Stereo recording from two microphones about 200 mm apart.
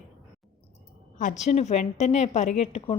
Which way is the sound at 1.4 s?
35° left (ahead or behind).